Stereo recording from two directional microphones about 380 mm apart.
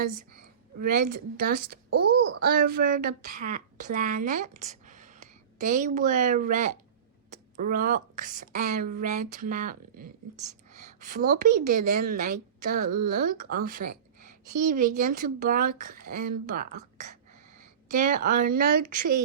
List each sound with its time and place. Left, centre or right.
0.8 s a woman's voice: right
17.8 s speech: right